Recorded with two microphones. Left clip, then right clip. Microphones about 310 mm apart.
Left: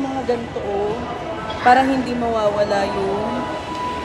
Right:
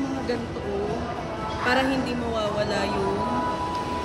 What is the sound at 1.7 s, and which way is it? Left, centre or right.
A woman's voice, centre.